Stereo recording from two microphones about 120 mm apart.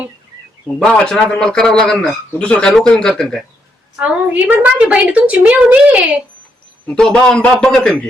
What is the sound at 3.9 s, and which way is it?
A woman's voice, 10° right (ahead or behind).